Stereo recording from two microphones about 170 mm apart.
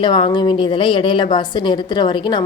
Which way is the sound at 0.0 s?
30° left (ahead or behind).